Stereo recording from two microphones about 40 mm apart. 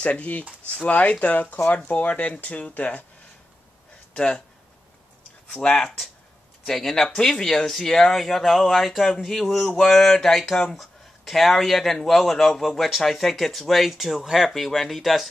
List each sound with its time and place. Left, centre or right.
0.0 s speech: left
4.1 s speech: left
5.5 s speech: centre
6.6 s speech: centre
10.8 s speech: centre